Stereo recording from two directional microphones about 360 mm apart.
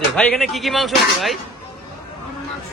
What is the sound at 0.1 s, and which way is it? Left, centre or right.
Speech, centre.